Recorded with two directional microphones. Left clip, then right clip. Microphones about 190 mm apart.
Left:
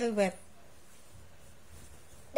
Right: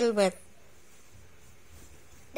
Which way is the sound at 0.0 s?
20° right (ahead or behind).